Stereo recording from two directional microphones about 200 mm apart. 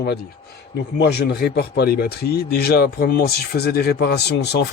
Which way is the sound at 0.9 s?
55° left (ahead or behind).